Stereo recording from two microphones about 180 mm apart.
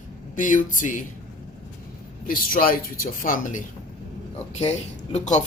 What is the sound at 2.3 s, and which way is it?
Speech, 50° left (ahead or behind).